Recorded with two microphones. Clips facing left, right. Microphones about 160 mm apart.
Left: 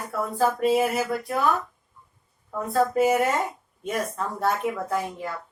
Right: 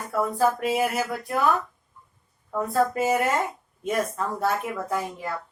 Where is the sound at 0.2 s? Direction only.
Centre (ahead or behind).